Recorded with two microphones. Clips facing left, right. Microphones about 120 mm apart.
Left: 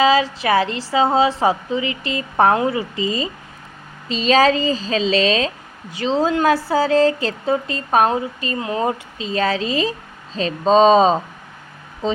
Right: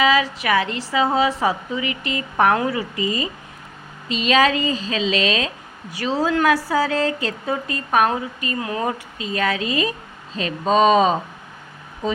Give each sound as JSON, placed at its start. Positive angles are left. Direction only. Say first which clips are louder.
{"t": 0.0, "sound": "a woman's voice", "louder": "left 3 dB", "side_deg": 30}